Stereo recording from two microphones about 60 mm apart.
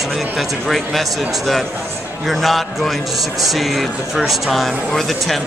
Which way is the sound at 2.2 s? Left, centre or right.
Centre.